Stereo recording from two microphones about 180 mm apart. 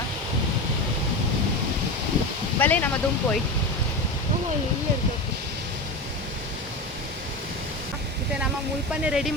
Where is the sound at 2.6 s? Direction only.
10° left (ahead or behind).